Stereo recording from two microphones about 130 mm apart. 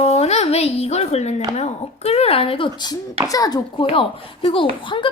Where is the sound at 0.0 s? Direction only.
55° left (ahead or behind).